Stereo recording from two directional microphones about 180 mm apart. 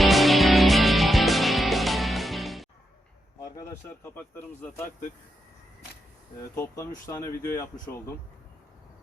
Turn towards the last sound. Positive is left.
turn(degrees=15)  # may be behind; listen again after turning